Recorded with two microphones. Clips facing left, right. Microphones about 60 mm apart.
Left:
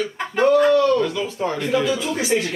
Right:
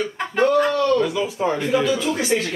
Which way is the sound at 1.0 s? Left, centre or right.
Centre.